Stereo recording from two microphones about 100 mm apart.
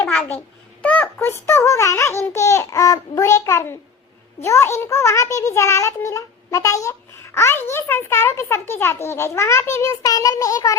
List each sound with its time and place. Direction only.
0.3 s a child's voice: 15° left (ahead or behind); by 10.8 s 35° left (ahead or behind)